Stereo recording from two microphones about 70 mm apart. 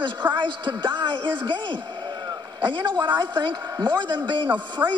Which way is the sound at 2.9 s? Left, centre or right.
Right.